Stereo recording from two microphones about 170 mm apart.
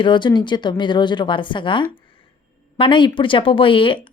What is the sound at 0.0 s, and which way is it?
Speech, 25° left (ahead or behind).